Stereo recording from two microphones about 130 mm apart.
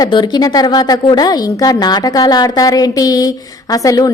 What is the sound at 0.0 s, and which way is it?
A woman's voice, 35° left (ahead or behind).